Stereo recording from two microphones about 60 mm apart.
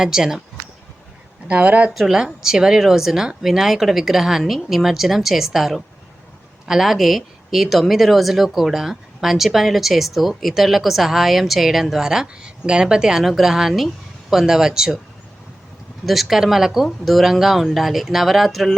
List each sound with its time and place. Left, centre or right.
0.0 s speech: centre
1.5 s speech: right
1.9 s speech: centre
16.0 s speech: centre